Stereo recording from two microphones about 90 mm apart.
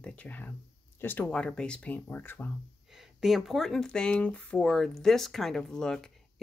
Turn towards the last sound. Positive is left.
turn(degrees=5)  # may be behind; listen again after turning